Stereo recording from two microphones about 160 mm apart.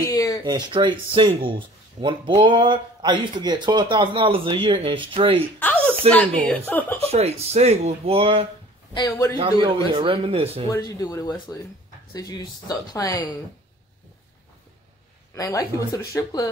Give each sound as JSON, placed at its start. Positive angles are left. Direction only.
{"t": 0.0, "sound": "a sound", "side_deg": 20}
{"t": 0.5, "sound": "speech", "side_deg": -25}
{"t": 5.6, "sound": "a woman's voice", "side_deg": 10}
{"t": 7.0, "sound": "speech", "side_deg": -40}
{"t": 8.9, "sound": "speech", "side_deg": 20}
{"t": 9.4, "sound": "speech", "side_deg": -35}
{"t": 10.7, "sound": "speech", "side_deg": 20}
{"t": 15.3, "sound": "speech", "side_deg": 20}